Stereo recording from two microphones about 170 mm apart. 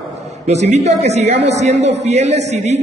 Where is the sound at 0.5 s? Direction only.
40° right (ahead or behind).